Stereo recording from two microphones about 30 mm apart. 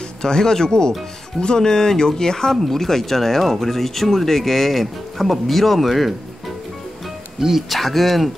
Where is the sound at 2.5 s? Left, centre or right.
Centre.